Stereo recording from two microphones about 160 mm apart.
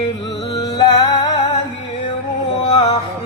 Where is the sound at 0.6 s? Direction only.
25° left (ahead or behind).